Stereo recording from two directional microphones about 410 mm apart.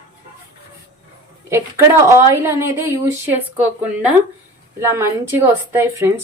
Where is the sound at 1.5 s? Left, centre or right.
Centre.